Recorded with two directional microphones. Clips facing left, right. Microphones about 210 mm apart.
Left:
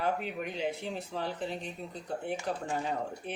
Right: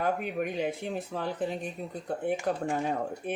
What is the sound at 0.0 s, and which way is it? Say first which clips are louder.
Speech: right 3 dB; 50° right (ahead or behind).